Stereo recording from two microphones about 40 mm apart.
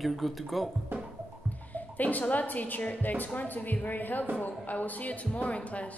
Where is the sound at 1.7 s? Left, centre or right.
Left.